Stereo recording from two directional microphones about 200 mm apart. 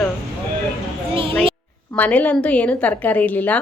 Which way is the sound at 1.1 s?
25° right (ahead or behind).